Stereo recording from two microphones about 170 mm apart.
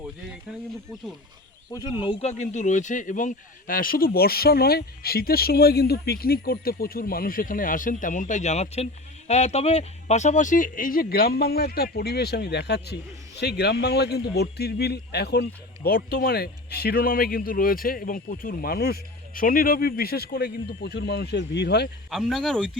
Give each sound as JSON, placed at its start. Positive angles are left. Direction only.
{"t": 1.7, "sound": "speech", "side_deg": 25}
{"t": 2.0, "sound": "speech", "side_deg": 40}
{"t": 22.1, "sound": "speech", "side_deg": 0}